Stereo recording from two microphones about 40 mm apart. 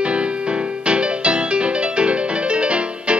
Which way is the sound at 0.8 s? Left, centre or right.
Right.